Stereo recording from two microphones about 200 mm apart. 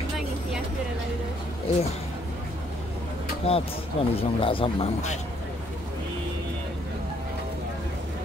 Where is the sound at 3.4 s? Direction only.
30° left (ahead or behind).